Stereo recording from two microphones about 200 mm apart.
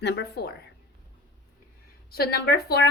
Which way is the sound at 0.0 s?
55° left (ahead or behind).